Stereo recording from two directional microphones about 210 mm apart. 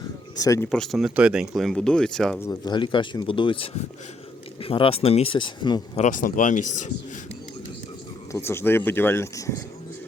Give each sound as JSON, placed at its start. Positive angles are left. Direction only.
{"t": 0.3, "sound": "speech", "side_deg": 15}
{"t": 0.7, "sound": "speech", "side_deg": 0}
{"t": 2.5, "sound": "speech", "side_deg": 20}
{"t": 6.0, "sound": "speech", "side_deg": 40}
{"t": 8.3, "sound": "speech", "side_deg": 10}